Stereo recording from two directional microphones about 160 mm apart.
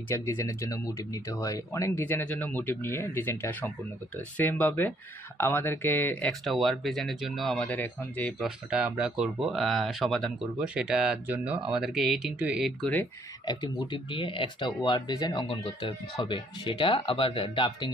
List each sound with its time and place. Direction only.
0.1 s speech: 15° left (ahead or behind)
6.4 s speech: centre (ahead or behind)
8.5 s speech: 5° right (ahead or behind)
13.5 s speech: 25° left (ahead or behind)